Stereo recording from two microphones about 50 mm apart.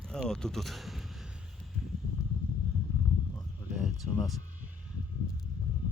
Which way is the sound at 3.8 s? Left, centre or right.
Centre.